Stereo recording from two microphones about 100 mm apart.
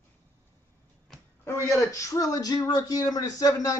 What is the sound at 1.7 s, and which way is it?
Speech, 35° left (ahead or behind).